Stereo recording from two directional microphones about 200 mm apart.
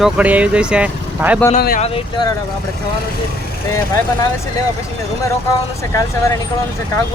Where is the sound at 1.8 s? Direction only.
25° left (ahead or behind).